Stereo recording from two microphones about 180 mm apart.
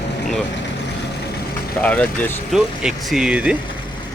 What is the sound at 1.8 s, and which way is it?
Speech, 5° left (ahead or behind).